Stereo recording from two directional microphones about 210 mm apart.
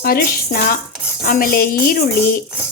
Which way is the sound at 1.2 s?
45° left (ahead or behind).